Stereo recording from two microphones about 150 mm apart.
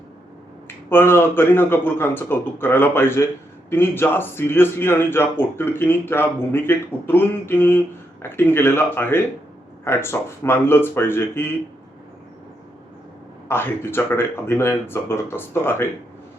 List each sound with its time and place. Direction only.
0.9 s speech: 15° left (ahead or behind)
13.5 s speech: 15° left (ahead or behind)